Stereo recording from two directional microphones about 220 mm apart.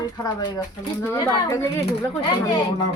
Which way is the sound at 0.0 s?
15° left (ahead or behind).